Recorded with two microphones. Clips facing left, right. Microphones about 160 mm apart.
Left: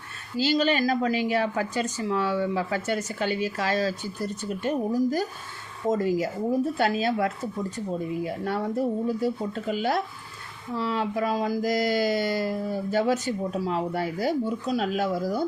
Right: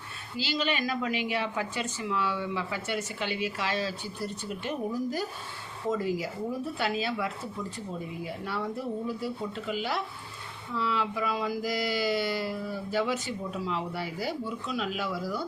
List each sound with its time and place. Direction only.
0.3 s speech: 45° left (ahead or behind)